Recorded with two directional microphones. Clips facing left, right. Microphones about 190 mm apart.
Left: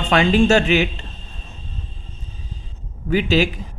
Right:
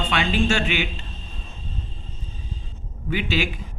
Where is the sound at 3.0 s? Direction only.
40° left (ahead or behind).